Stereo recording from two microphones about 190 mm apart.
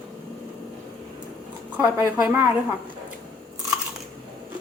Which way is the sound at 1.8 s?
10° right (ahead or behind).